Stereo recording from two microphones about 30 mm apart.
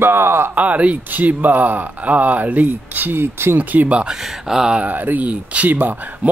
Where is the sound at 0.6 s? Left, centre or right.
Right.